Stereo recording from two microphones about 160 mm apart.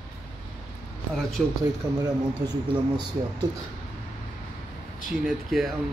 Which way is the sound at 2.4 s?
25° right (ahead or behind).